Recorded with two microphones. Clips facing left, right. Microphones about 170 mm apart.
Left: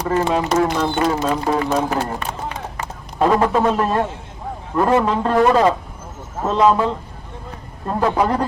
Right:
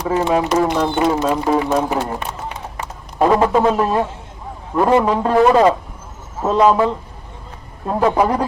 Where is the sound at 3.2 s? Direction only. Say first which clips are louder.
Right 2 dB; 10° right (ahead or behind).